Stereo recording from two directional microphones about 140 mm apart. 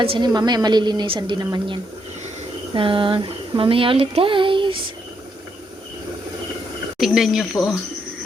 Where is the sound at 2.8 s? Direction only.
40° right (ahead or behind).